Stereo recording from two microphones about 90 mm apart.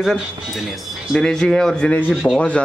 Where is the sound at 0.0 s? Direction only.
Centre (ahead or behind).